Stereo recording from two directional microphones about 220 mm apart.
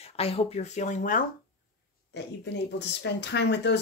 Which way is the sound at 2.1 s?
50° left (ahead or behind).